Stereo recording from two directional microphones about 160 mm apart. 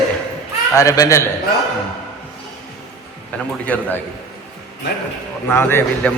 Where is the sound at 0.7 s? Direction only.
20° left (ahead or behind).